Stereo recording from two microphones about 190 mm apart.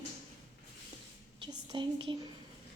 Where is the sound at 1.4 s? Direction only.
25° right (ahead or behind).